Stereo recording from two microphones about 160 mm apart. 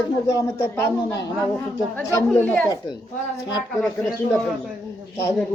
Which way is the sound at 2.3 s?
10° left (ahead or behind).